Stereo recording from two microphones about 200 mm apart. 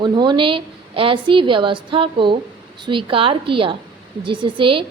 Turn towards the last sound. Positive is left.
turn(degrees=-25)  # may be behind; listen again after turning